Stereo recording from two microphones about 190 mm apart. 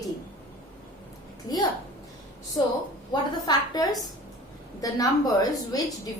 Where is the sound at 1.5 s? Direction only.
20° left (ahead or behind).